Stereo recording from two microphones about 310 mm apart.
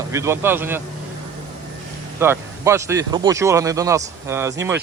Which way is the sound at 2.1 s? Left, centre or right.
Centre.